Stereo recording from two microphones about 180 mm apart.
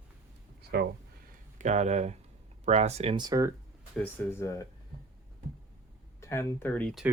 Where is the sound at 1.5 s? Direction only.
40° right (ahead or behind).